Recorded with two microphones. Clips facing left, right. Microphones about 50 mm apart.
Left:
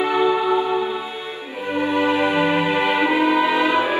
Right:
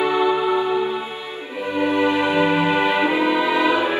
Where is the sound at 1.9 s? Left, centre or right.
Left.